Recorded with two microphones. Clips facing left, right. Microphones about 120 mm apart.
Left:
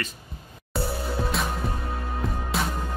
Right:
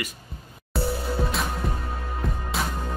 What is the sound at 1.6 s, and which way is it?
Music, centre (ahead or behind).